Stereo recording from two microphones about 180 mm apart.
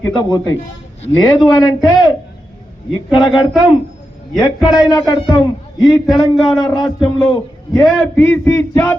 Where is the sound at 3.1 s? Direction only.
25° left (ahead or behind).